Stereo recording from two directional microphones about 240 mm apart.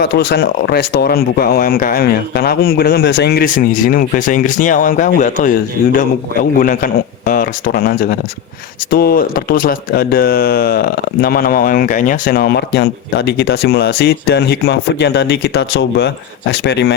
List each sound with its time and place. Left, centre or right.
0.0 s speech: left
6.6 s speech: left